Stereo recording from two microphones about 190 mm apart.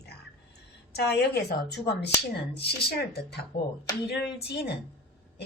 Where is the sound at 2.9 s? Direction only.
55° left (ahead or behind).